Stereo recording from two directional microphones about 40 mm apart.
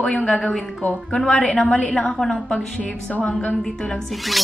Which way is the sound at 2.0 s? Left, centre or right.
Centre.